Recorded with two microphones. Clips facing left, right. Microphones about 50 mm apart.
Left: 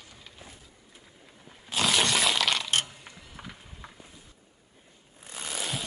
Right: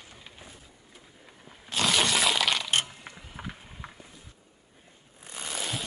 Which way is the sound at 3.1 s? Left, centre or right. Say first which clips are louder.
Right 3 dB; right.